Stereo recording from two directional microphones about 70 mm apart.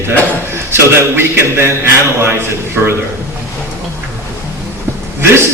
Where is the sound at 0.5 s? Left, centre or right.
Right.